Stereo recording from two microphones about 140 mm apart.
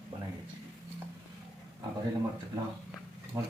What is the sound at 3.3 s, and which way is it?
Speech, 20° right (ahead or behind).